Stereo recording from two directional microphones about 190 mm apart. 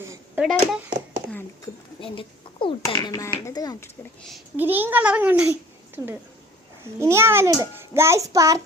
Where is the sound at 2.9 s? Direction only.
15° left (ahead or behind).